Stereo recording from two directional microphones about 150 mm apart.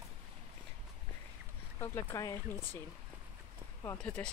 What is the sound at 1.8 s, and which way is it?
Speech, 15° left (ahead or behind).